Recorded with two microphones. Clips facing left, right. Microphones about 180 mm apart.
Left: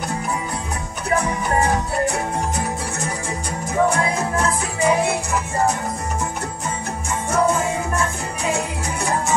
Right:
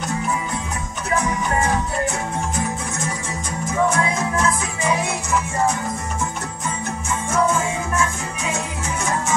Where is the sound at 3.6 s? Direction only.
35° left (ahead or behind).